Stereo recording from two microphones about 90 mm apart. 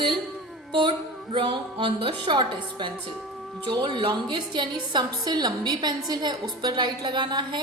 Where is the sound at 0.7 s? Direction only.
60° right (ahead or behind).